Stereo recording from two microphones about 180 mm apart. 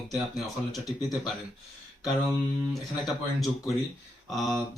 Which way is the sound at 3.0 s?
Centre (ahead or behind).